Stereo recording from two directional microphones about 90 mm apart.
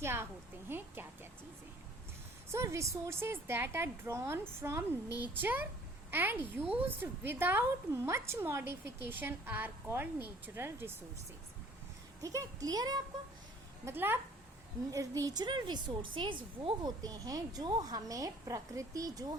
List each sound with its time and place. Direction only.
0.0 s a woman's voice: 25° right (ahead or behind)
0.7 s a sound: 25° right (ahead or behind)
2.5 s a woman's voice: 30° right (ahead or behind)
12.2 s a woman's voice: 35° right (ahead or behind)
13.8 s a woman's voice: 25° right (ahead or behind)
14.8 s a woman's voice: 35° right (ahead or behind)
15.3 s a woman's voice: 55° right (ahead or behind)
17.0 s a woman's voice: 45° right (ahead or behind)